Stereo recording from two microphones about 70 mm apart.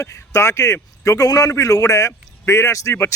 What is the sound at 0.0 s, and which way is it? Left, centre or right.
Speech, left.